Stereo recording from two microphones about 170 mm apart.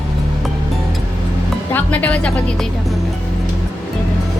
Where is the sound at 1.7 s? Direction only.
10° left (ahead or behind).